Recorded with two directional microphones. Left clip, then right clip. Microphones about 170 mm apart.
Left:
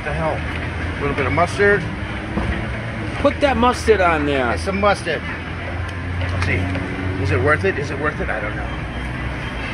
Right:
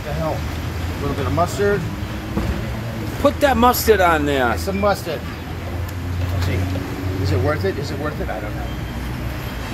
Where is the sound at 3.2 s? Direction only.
15° right (ahead or behind).